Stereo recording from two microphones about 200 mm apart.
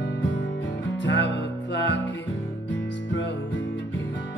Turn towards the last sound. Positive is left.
turn(degrees=65)  # may be behind; listen again after turning